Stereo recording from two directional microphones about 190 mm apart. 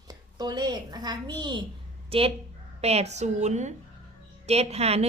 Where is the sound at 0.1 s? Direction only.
20° right (ahead or behind).